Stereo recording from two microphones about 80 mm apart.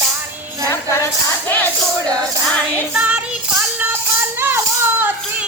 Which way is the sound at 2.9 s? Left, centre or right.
Centre.